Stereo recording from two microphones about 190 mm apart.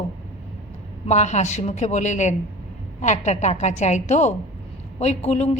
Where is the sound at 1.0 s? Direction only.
40° left (ahead or behind).